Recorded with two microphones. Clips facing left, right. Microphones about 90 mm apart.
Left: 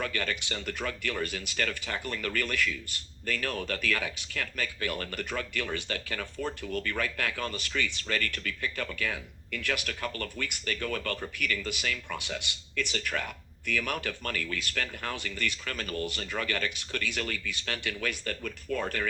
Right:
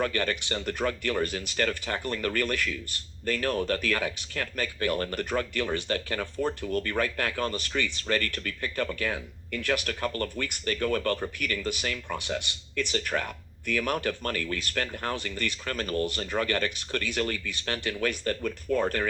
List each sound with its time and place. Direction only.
0.0 s speech: 35° right (ahead or behind)